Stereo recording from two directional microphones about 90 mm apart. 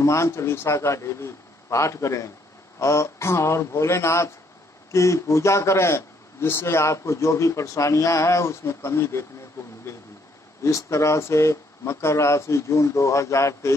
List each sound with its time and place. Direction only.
0.0 s speech: 35° left (ahead or behind)
10.6 s speech: 35° left (ahead or behind)